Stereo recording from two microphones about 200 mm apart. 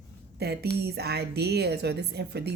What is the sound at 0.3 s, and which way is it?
Speech, 55° right (ahead or behind).